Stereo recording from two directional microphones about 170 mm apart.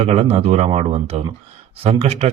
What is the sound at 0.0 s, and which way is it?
Speech, 40° right (ahead or behind).